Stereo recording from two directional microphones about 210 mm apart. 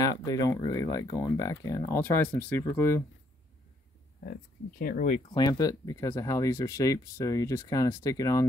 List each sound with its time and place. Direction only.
0.0 s speech: 15° left (ahead or behind)
4.3 s speech: 45° left (ahead or behind)
5.3 s speech: 20° left (ahead or behind)